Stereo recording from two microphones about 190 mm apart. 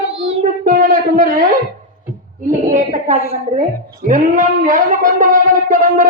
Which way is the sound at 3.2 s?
50° left (ahead or behind).